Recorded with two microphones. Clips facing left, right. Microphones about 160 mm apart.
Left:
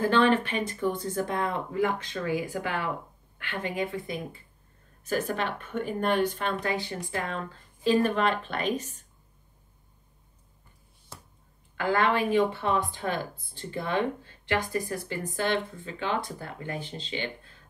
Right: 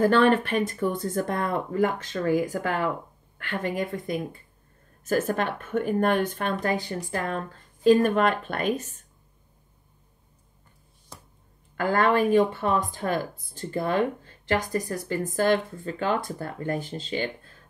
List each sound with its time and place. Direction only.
0.0 s speech: 50° right (ahead or behind)
11.7 s speech: 45° right (ahead or behind)